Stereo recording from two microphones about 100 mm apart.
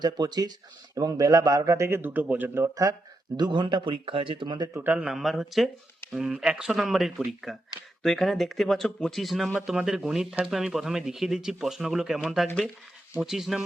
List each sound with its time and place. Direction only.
0.0 s speech: 45° right (ahead or behind); by 2.6 s 15° right (ahead or behind)
3.3 s speech: 50° right (ahead or behind)
4.7 s speech: 20° right (ahead or behind)
4.9 s speech: 5° right (ahead or behind)